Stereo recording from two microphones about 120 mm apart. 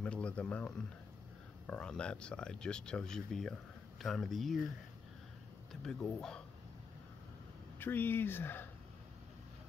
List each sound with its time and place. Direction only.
0.0 s speech: 10° left (ahead or behind)
5.7 s speech: 5° left (ahead or behind)
7.8 s speech: 15° left (ahead or behind)